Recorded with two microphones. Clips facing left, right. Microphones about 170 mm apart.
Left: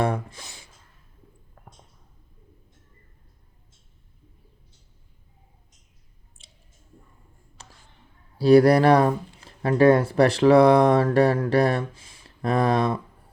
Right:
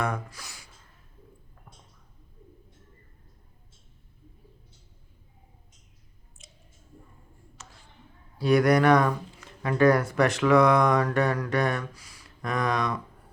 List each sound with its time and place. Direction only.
0.0 s speech: 30° left (ahead or behind)
6.4 s squish: 30° left (ahead or behind)
7.6 s a sound: 35° left (ahead or behind)
8.4 s speech: 30° left (ahead or behind)